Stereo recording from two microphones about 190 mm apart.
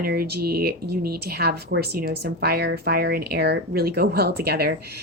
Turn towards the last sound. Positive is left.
turn(degrees=-55)  # may be behind; listen again after turning